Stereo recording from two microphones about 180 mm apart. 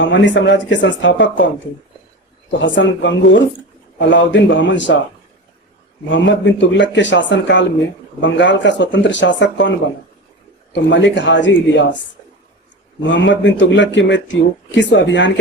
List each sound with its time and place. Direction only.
0.0 s speech: 90° left
2.5 s a man's voice: 90° left
6.1 s a man's voice: 90° left
13.1 s a man's voice: 90° left